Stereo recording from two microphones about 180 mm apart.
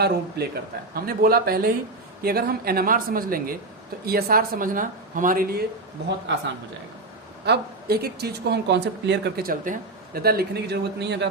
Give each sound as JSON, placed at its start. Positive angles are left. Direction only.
{"t": 0.4, "sound": "speech", "side_deg": -65}
{"t": 6.3, "sound": "a woman's voice", "side_deg": -90}
{"t": 7.4, "sound": "speech", "side_deg": -60}